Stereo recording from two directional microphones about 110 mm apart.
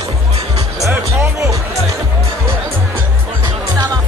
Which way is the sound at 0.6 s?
30° right (ahead or behind).